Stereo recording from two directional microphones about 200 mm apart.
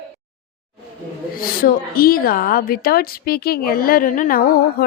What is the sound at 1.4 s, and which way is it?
A woman's voice, 45° left (ahead or behind).